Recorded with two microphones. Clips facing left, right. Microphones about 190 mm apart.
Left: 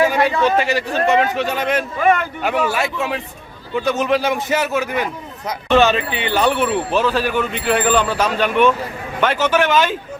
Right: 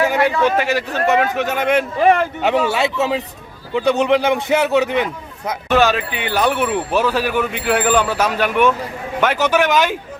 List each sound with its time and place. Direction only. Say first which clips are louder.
0.5 s a man's voice: left 1 dB; 15° left (ahead or behind)
1.4 s speech: right 1 dB; 10° right (ahead or behind)
2.0 s speech: right 1 dB; 35° right (ahead or behind)
5.6 s speech: left 1 dB; 10° right (ahead or behind)